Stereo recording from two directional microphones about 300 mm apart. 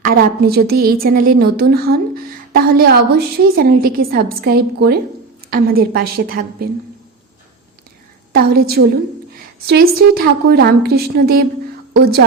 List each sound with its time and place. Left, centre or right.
0.0 s a woman's voice: right
8.3 s a woman's voice: right